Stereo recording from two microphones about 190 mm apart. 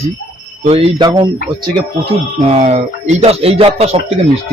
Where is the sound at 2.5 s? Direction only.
35° right (ahead or behind).